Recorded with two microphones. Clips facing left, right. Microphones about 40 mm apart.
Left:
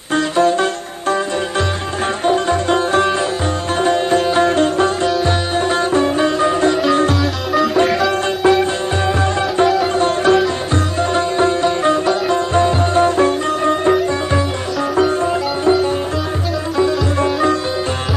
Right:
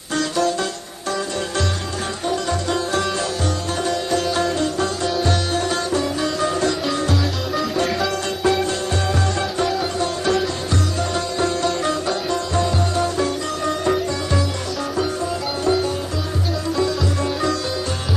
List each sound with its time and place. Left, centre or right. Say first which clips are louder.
0.1 s music: left 6 dB; left
2.2 s music: left 7 dB; left
3.8 s sitar: left 8 dB; left
5.2 s sitar: left 4 dB; left
7.1 s music: left 5 dB; centre
8.4 s music: left 5 dB; left
9.6 s music: left 7 dB; centre
10.0 s music: left 7 dB; left
12.3 s sitar: left 6 dB; left
14.9 s music: left 9 dB; left
16.7 s music: left 7 dB; left